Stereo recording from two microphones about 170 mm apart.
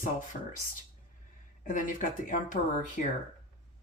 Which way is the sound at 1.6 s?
50° left (ahead or behind).